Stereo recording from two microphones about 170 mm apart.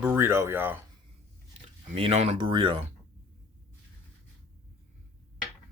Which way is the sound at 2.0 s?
35° right (ahead or behind).